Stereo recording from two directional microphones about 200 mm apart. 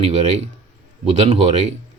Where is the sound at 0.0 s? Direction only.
35° right (ahead or behind).